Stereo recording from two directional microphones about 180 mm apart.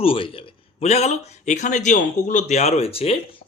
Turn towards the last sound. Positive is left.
turn(degrees=35)  # may be behind; listen again after turning